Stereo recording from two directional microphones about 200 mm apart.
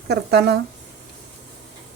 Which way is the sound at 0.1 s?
55° right (ahead or behind).